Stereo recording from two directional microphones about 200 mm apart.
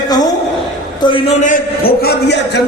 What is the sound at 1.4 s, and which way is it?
A man's voice, 45° left (ahead or behind).